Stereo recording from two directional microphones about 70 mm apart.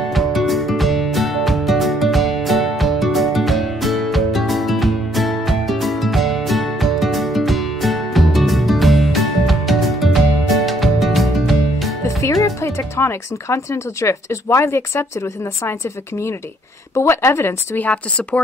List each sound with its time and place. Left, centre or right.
0.1 s music: centre
12.2 s music: left
14.0 s speech: left
16.9 s speech: left
17.7 s speech: left